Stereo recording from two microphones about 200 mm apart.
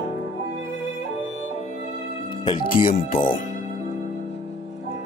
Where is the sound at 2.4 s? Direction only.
25° left (ahead or behind).